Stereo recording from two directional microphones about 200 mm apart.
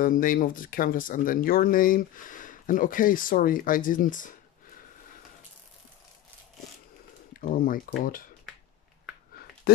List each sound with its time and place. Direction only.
0.0 s speech: 45° left (ahead or behind)
7.3 s speech: 45° left (ahead or behind)